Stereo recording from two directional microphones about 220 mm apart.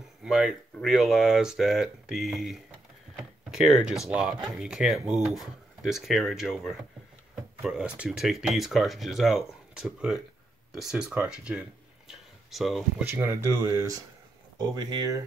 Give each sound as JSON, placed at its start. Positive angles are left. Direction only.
{"t": 0.2, "sound": "speech", "side_deg": 0}
{"t": 13.1, "sound": "speech", "side_deg": -10}